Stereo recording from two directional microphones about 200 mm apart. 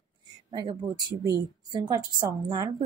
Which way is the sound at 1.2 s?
20° right (ahead or behind).